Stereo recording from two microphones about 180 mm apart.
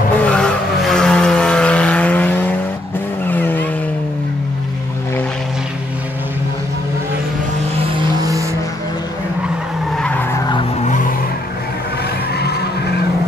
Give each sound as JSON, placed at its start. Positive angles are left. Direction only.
{"t": 0.2, "sound": "vehicle", "side_deg": 5}
{"t": 10.8, "sound": "vehicle", "side_deg": 45}